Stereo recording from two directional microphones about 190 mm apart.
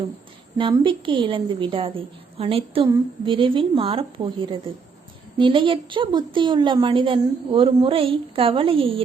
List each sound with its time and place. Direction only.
0.6 s a woman's voice: 25° right (ahead or behind)